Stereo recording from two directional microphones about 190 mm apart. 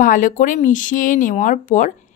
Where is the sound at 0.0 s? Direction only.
45° left (ahead or behind).